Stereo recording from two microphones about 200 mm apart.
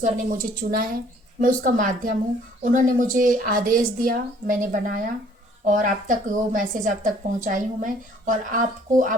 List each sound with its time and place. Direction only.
0.0 s a woman's voice: 45° right (ahead or behind)